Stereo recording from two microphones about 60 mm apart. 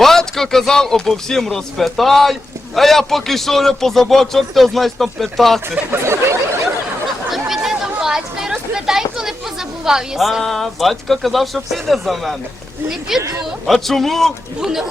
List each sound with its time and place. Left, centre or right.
0.0 s a man's voice: centre
5.9 s a sound: right
7.3 s chatter: centre
8.0 s a sound: centre
12.9 s speech: centre
13.7 s a man's voice: centre
14.6 s a man's voice: centre